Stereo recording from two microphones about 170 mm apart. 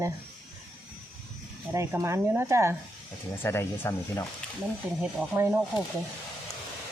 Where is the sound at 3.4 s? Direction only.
15° left (ahead or behind).